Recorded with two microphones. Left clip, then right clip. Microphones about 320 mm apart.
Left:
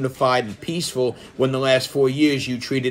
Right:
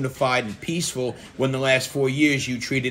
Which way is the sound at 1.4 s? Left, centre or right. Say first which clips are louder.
Left 2 dB; centre.